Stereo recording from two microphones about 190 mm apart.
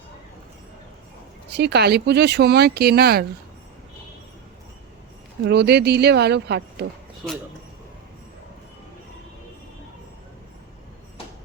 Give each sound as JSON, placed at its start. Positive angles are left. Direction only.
{"t": 1.5, "sound": "speech", "side_deg": -60}
{"t": 5.5, "sound": "speech", "side_deg": -60}